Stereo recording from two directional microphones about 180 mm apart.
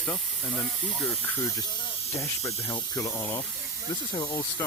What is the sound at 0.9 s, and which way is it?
Speech, 5° left (ahead or behind).